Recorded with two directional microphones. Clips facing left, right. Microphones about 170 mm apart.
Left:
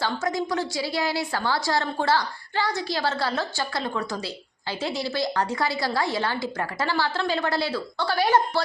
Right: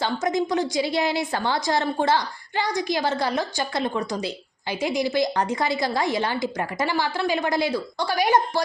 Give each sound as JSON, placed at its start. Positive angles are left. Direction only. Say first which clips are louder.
{"t": 0.0, "sound": "a woman's voice", "louder": "right 3 dB", "side_deg": -20}